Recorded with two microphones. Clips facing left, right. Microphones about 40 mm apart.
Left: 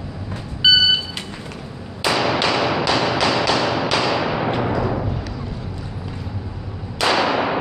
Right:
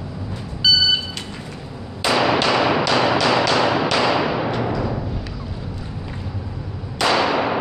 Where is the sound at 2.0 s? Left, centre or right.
Centre.